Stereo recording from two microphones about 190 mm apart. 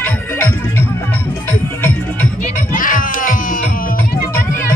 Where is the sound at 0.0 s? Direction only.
10° left (ahead or behind).